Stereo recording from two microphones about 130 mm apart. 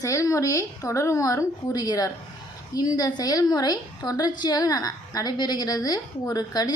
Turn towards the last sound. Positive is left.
turn(degrees=30)  # may be behind; listen again after turning